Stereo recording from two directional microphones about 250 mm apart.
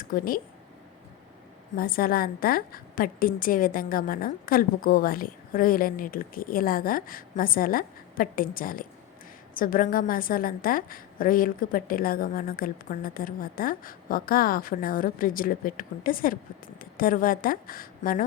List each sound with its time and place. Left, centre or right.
0.0 s speech: left
1.7 s a woman's voice: left